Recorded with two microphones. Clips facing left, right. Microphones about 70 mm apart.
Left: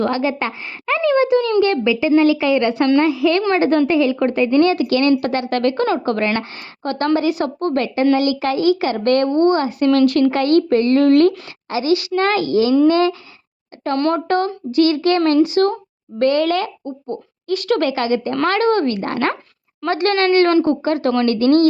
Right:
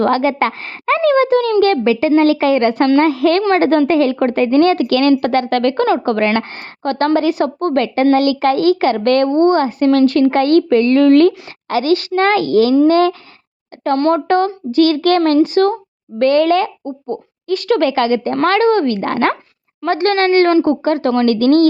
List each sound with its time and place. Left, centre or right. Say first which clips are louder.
0.0 s speech: right 5 dB; right
13.8 s speech: right 4 dB; right